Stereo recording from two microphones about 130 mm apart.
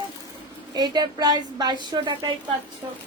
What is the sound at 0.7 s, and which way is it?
Speech, 35° right (ahead or behind).